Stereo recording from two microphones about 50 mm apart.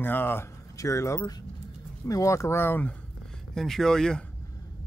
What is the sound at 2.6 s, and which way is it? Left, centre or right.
Speech, left.